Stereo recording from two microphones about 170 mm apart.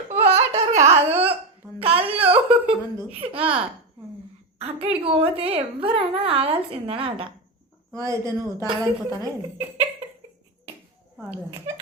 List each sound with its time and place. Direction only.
0.3 s laughter: 40° right (ahead or behind)
1.8 s wail: 35° right (ahead or behind)
3.1 s a woman's voice: 35° right (ahead or behind)
4.6 s a woman's voice: 35° right (ahead or behind)
8.0 s a woman's voice: 20° right (ahead or behind)